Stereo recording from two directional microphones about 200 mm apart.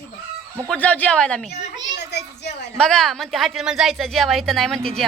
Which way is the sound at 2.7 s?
5° left (ahead or behind).